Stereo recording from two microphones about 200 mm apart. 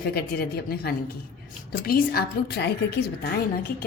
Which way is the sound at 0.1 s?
50° left (ahead or behind).